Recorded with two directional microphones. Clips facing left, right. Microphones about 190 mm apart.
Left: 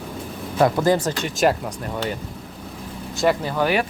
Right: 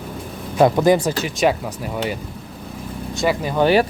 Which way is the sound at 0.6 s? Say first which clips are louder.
Right 4 dB; 20° right (ahead or behind).